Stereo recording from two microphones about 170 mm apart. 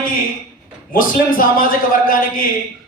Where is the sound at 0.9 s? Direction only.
55° left (ahead or behind).